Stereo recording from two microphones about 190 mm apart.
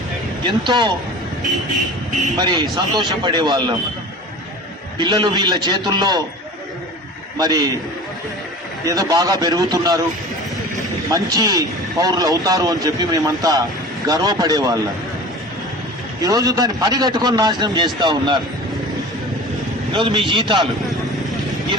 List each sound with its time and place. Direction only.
0.4 s speech: 25° right (ahead or behind)
2.3 s speech: 25° right (ahead or behind)
4.9 s speech: 25° right (ahead or behind)
7.3 s speech: 20° right (ahead or behind)
8.8 s speech: 20° right (ahead or behind)
11.1 s speech: 20° right (ahead or behind)
16.2 s speech: 20° right (ahead or behind)
19.9 s speech: 25° right (ahead or behind)